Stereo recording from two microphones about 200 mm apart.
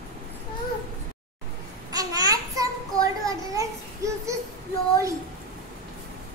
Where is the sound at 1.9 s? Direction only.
20° right (ahead or behind).